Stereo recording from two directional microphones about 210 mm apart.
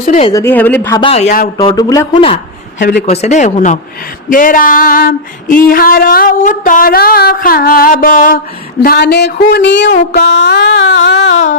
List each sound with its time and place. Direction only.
0.0 s speech: 35° left (ahead or behind)
0.3 s speech: 15° left (ahead or behind)
1.0 s speech: 30° left (ahead or behind)
1.5 s speech: 15° left (ahead or behind)
2.7 s a man's voice: 55° left (ahead or behind)
3.1 s speech: 30° left (ahead or behind)
4.3 s female singing: 40° left (ahead or behind); by 9.9 s 55° left (ahead or behind)
9.9 s music: 50° left (ahead or behind)